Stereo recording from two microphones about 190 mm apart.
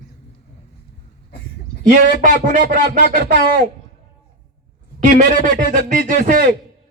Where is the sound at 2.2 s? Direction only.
45° right (ahead or behind).